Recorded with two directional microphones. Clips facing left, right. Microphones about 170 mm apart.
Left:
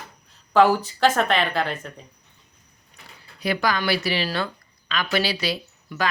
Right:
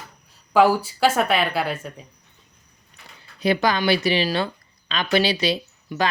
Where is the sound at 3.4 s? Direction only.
25° right (ahead or behind).